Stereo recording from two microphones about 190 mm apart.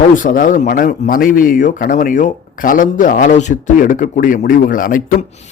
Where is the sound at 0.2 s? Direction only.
45° left (ahead or behind).